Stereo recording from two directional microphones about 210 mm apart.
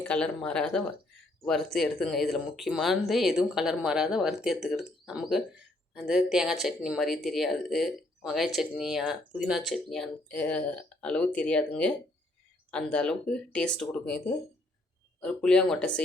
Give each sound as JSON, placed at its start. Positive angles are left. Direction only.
{"t": 0.0, "sound": "speech", "side_deg": 5}
{"t": 15.2, "sound": "speech", "side_deg": 5}